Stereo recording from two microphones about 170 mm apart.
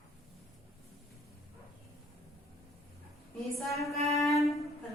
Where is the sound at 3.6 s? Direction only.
Centre (ahead or behind).